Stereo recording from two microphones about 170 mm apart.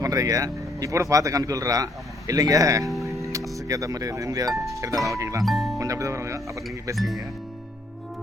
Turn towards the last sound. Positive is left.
turn(degrees=0)  # may be behind; listen again after turning